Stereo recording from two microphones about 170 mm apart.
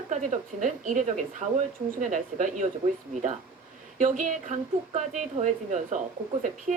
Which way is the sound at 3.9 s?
50° right (ahead or behind).